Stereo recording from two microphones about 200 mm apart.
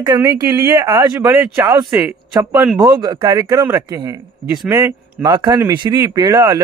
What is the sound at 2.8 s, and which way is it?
Speech, 20° right (ahead or behind).